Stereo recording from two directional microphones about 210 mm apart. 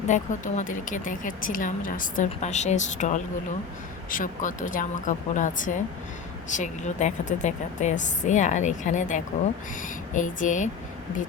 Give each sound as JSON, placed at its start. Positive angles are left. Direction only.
{"t": 0.1, "sound": "a woman's voice", "side_deg": 35}